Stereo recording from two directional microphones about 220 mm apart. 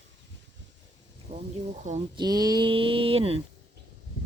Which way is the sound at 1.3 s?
30° right (ahead or behind).